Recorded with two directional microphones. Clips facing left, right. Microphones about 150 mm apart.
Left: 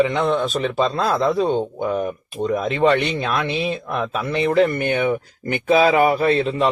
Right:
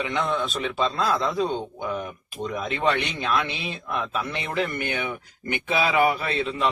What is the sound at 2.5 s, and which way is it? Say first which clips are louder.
Speech: left 9 dB; 40° left (ahead or behind).